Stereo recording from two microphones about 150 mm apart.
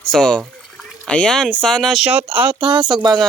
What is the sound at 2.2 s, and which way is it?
Speech, 40° right (ahead or behind).